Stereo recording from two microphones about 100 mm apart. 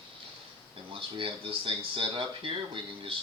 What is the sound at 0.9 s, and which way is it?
Speech, 60° right (ahead or behind).